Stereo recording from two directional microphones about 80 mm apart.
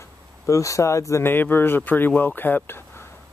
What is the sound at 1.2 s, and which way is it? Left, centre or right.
Speech, left.